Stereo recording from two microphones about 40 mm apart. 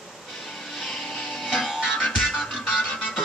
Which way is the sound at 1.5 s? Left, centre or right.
Centre.